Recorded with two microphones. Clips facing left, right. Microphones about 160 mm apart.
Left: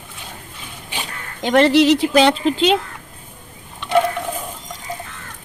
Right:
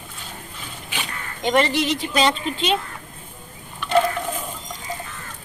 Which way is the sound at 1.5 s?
75° left (ahead or behind).